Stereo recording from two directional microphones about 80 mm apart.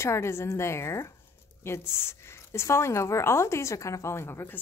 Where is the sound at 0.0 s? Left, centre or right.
Left.